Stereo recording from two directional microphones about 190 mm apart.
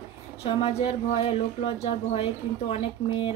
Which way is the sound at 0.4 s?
30° left (ahead or behind).